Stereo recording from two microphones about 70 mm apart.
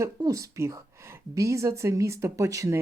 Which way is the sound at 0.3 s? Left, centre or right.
Right.